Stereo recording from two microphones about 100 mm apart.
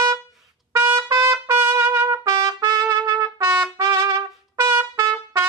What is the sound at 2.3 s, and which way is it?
Trumpet, 45° right (ahead or behind).